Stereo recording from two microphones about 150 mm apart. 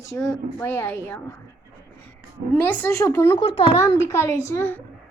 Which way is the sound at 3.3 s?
35° left (ahead or behind).